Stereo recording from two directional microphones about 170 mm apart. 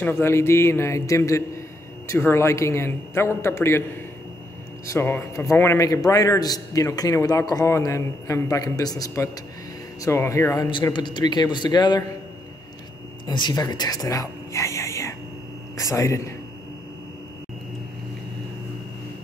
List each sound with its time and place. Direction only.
0.0 s a man's voice: 15° left (ahead or behind)
4.8 s a man's voice: 15° left (ahead or behind)
13.3 s a man's voice: 25° left (ahead or behind)